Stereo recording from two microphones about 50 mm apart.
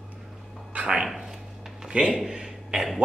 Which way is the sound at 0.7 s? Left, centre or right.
Centre.